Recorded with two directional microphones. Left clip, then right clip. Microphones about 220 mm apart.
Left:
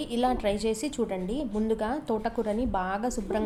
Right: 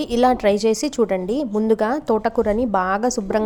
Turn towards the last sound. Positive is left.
turn(degrees=-35)  # may be behind; listen again after turning